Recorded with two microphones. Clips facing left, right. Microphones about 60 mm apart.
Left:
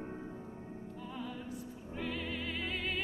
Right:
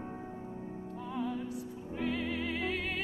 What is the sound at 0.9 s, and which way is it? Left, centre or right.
Music, right.